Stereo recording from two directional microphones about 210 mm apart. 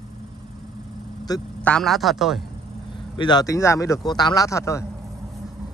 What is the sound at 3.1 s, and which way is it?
Speech, 20° left (ahead or behind).